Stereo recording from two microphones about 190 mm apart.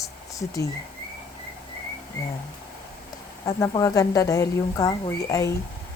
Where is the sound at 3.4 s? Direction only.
20° left (ahead or behind).